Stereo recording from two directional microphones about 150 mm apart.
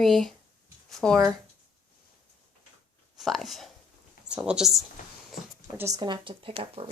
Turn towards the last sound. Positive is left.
turn(degrees=-40)  # may be behind; listen again after turning